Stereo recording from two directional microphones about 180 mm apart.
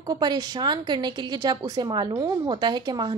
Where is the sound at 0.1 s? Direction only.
25° right (ahead or behind).